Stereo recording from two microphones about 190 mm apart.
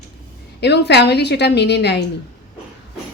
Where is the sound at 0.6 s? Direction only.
60° left (ahead or behind).